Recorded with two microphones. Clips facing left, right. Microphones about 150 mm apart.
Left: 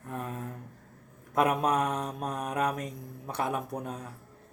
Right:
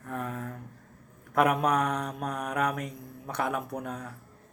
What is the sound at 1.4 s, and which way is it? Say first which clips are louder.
Mantra: right 1 dB; 25° left (ahead or behind).